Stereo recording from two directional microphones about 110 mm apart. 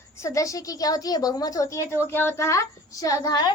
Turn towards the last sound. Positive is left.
turn(degrees=35)  # may be behind; listen again after turning